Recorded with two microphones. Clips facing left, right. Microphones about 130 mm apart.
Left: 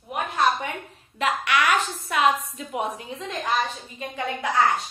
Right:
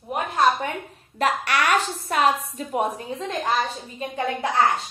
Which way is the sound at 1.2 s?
40° right (ahead or behind).